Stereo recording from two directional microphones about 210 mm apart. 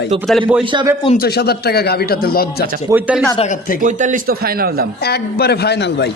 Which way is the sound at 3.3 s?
35° left (ahead or behind).